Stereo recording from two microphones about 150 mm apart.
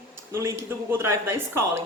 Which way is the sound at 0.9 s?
15° right (ahead or behind).